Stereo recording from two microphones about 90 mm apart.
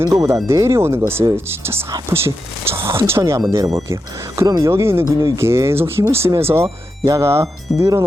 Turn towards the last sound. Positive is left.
turn(degrees=-40)  # may be behind; listen again after turning